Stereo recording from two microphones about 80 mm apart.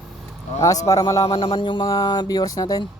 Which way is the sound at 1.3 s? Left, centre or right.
Left.